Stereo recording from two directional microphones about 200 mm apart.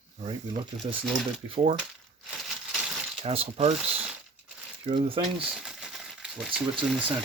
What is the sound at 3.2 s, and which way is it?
Speech, 30° right (ahead or behind).